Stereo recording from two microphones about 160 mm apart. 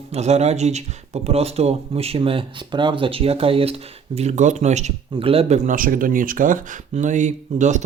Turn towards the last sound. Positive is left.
turn(degrees=-50)  # may be behind; listen again after turning